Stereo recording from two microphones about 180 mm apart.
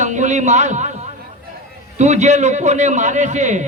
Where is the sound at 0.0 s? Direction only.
40° right (ahead or behind).